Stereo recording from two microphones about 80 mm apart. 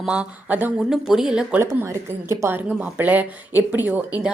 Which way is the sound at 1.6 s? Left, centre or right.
Right.